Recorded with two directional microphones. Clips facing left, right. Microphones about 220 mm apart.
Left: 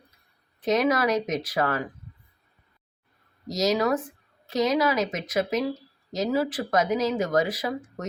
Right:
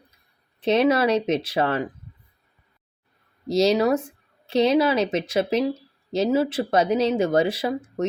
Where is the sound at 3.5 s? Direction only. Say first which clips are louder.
Right 5 dB; 30° right (ahead or behind).